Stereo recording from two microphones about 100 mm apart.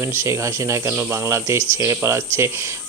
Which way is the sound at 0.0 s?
25° right (ahead or behind).